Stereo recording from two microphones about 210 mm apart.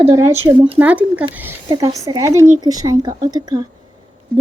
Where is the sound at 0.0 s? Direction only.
10° right (ahead or behind).